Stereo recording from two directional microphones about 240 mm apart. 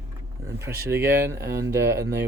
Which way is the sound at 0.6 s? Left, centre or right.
Centre.